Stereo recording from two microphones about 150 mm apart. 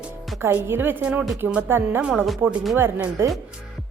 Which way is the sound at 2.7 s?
15° right (ahead or behind).